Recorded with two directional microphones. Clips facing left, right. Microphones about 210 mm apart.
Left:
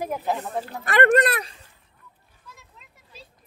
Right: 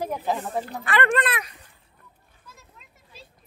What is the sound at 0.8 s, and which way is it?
Speech, 45° left (ahead or behind).